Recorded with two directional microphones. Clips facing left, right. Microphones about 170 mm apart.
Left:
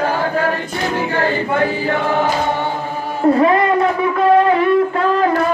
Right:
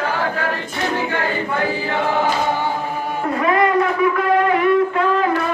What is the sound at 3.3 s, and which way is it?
Speech, 30° left (ahead or behind).